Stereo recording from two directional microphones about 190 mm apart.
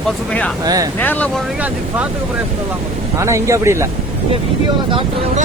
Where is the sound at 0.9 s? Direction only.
10° left (ahead or behind).